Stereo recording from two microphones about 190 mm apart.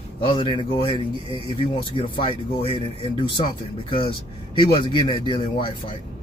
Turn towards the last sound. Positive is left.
turn(degrees=25)  # may be behind; listen again after turning